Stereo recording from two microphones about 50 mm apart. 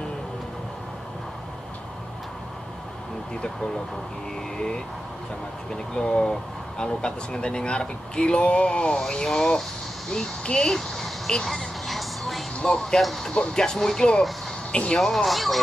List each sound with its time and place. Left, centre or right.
5.7 s speech: centre
10.4 s speech: centre
10.7 s a sound: centre
12.5 s speech: centre
13.0 s speech: centre
13.3 s speech: centre
14.7 s speech: left
15.0 s speech: centre